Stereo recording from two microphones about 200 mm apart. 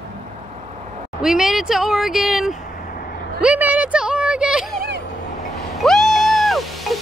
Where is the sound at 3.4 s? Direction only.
5° right (ahead or behind).